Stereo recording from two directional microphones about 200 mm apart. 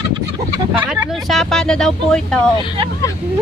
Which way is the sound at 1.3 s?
Centre (ahead or behind).